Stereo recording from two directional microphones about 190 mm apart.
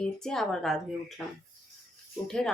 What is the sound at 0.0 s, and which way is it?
Speech, 5° left (ahead or behind).